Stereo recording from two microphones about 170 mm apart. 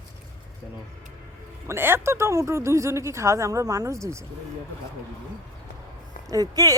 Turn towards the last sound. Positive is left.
turn(degrees=-20)  # may be behind; listen again after turning